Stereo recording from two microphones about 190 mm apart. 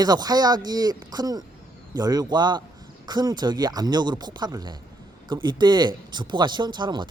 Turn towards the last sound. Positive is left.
turn(degrees=-25)  # may be behind; listen again after turning